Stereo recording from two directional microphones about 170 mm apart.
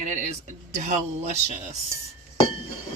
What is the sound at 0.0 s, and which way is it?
Speech, 45° right (ahead or behind).